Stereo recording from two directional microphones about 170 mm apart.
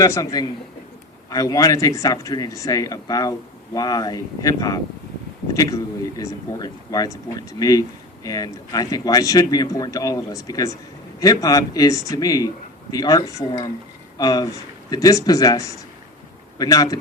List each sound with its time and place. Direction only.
0.0 s speech: 20° left (ahead or behind)